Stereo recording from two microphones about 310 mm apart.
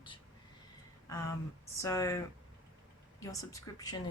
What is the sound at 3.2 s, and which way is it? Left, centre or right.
Speech, centre.